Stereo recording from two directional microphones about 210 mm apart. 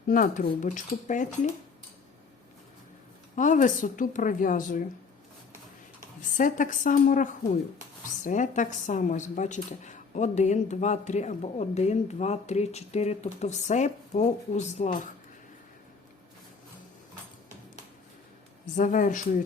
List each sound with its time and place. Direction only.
0.1 s a woman's voice: 40° left (ahead or behind)
3.3 s a woman's voice: 35° left (ahead or behind)
6.3 s a woman's voice: 40° left (ahead or behind)
18.8 s a woman's voice: 40° left (ahead or behind)